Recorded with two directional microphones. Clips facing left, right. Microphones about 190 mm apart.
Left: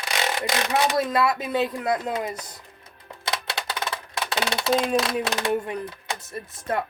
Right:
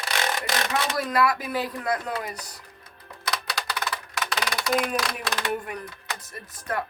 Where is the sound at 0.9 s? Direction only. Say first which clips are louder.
Left 2 dB; 25° left (ahead or behind).